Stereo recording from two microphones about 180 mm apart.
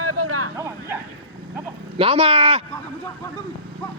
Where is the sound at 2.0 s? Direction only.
35° right (ahead or behind).